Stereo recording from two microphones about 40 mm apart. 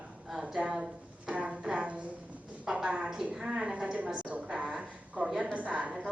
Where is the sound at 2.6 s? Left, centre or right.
Right.